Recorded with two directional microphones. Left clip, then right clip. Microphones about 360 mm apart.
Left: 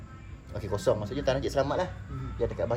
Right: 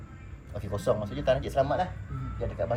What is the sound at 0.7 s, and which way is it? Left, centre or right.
Speech, centre.